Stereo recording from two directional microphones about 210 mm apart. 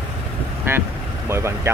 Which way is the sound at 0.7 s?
10° right (ahead or behind).